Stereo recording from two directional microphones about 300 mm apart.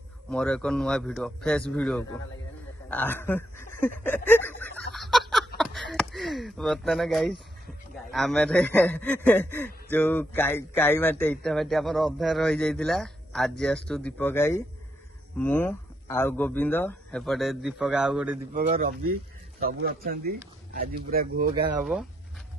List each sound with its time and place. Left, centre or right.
0.3 s speech: centre
3.8 s a sound: centre
5.6 s speech: centre
18.5 s speech: right